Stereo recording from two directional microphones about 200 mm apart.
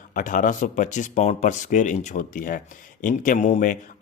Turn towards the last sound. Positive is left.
turn(degrees=40)  # may be behind; listen again after turning